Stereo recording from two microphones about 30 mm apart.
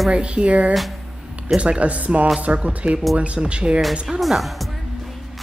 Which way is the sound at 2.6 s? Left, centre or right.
Right.